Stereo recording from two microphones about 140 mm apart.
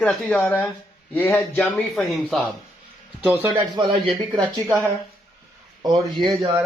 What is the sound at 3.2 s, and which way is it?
Speech, 15° right (ahead or behind).